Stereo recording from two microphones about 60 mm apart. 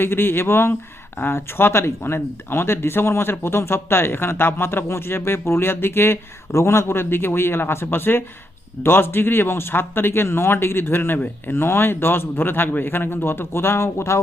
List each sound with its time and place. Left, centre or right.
0.0 s speech: left